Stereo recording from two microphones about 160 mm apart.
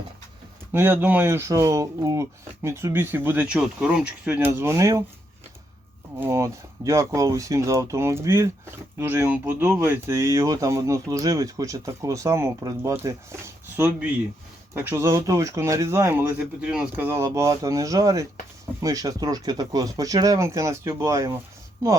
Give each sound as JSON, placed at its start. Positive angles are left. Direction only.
{"t": 0.7, "sound": "speech", "side_deg": -15}
{"t": 6.1, "sound": "speech", "side_deg": -15}